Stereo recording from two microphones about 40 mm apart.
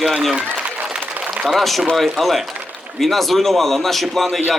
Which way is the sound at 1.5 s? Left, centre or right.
Centre.